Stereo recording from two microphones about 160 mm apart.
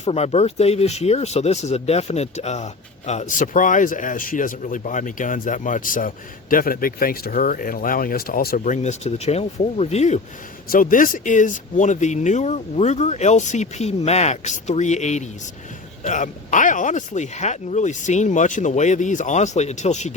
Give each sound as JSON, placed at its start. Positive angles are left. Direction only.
{"t": 0.0, "sound": "speech", "side_deg": 40}
{"t": 10.7, "sound": "speech", "side_deg": 60}